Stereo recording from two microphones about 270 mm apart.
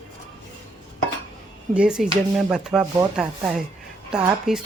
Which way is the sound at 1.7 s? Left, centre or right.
Centre.